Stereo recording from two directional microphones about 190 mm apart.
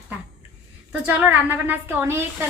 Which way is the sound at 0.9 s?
5° right (ahead or behind).